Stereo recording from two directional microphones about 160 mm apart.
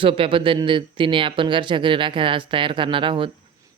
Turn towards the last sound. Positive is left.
turn(degrees=-30)  # may be behind; listen again after turning